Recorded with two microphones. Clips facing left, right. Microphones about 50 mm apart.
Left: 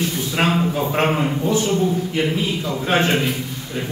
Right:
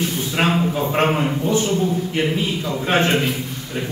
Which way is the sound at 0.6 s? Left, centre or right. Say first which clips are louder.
Even; centre.